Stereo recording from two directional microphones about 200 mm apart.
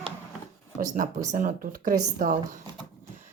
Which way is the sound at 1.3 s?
45° right (ahead or behind).